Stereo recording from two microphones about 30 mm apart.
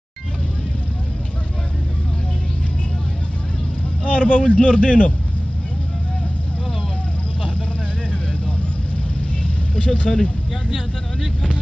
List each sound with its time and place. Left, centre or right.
4.0 s a man's voice: left
9.4 s vehicle: left